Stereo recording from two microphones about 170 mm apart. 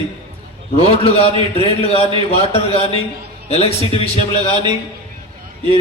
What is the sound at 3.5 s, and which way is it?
Speech, 35° left (ahead or behind).